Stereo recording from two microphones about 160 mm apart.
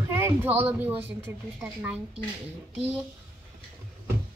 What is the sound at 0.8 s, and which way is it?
A child's voice, 15° right (ahead or behind).